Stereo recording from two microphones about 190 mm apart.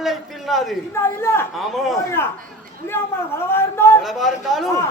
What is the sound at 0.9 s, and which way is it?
Speech, 15° left (ahead or behind).